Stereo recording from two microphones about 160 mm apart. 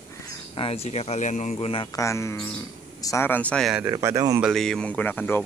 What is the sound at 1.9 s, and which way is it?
Speech, 20° left (ahead or behind).